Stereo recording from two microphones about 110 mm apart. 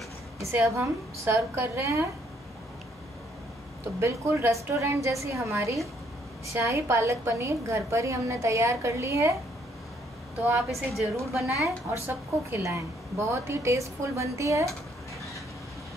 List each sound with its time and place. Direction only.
0.4 s a woman's voice: 25° right (ahead or behind)
4.0 s a woman's voice: 25° right (ahead or behind)
10.4 s a woman's voice: 20° right (ahead or behind)